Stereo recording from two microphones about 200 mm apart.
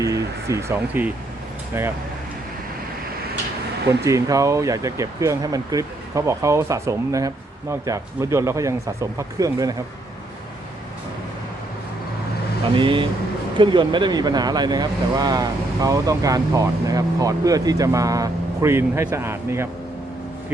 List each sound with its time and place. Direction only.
0.0 s speech: 15° right (ahead or behind)
4.0 s speech: 15° right (ahead or behind)
12.7 s speech: 25° right (ahead or behind)